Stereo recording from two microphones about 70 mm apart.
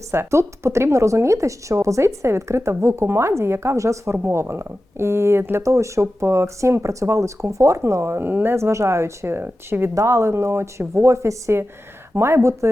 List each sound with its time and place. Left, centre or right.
0.1 s speech: right
8.2 s speech: right
8.5 s speech: right
9.9 s speech: right